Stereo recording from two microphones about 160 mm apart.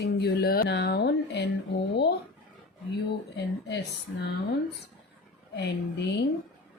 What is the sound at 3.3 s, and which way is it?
Speech, 90° left.